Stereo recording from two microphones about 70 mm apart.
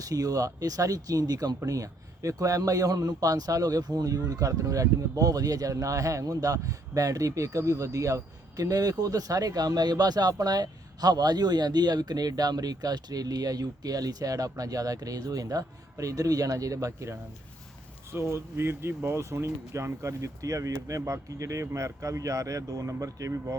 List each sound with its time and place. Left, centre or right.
0.0 s speech: right